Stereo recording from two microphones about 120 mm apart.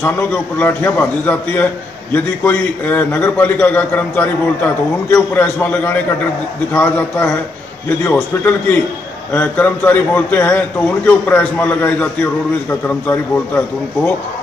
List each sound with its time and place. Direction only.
0.0 s a man's voice: 15° left (ahead or behind)